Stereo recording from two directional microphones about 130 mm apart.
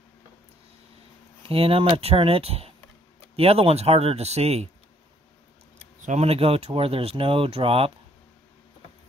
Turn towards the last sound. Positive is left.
turn(degrees=-45)  # may be behind; listen again after turning